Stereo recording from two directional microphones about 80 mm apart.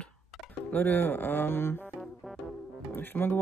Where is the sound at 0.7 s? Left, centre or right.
Left.